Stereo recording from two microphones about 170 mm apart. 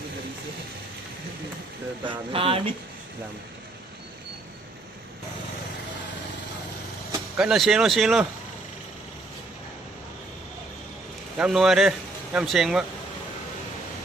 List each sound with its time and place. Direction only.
2.0 s speech: 30° right (ahead or behind)
7.3 s speech: centre (ahead or behind)
11.3 s speech: 5° right (ahead or behind)